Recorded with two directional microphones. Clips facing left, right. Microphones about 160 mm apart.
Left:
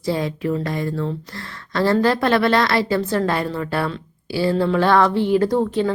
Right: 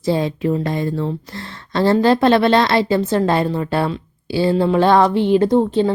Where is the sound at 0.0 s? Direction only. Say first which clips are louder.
Right 4 dB; 25° right (ahead or behind).